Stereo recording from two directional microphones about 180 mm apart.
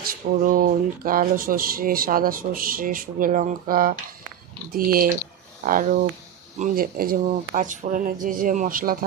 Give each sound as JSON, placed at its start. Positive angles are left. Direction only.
{"t": 0.0, "sound": "speech", "side_deg": -50}